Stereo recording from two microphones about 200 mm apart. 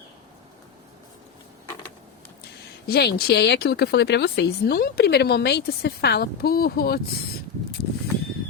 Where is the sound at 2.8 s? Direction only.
50° left (ahead or behind).